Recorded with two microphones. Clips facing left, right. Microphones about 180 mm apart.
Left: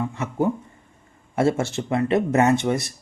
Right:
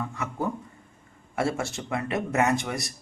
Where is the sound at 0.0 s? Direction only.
25° left (ahead or behind).